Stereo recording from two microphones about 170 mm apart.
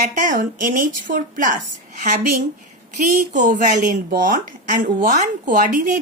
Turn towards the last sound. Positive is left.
turn(degrees=-50)  # may be behind; listen again after turning